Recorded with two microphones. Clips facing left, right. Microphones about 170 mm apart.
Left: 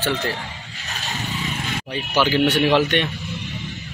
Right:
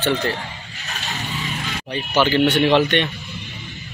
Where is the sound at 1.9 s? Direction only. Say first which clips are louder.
Right 2 dB; 10° left (ahead or behind).